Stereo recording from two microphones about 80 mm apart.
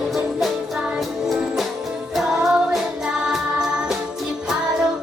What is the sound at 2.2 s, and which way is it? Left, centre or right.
Music, centre.